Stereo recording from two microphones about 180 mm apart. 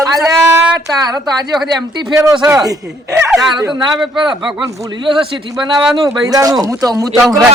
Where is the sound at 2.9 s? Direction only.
5° right (ahead or behind).